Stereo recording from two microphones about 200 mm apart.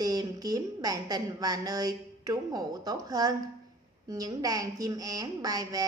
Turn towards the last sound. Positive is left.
turn(degrees=-15)  # may be behind; listen again after turning